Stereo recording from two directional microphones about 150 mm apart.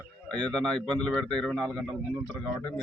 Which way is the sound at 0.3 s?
5° left (ahead or behind).